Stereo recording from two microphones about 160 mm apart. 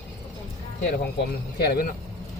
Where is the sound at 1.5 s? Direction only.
80° left.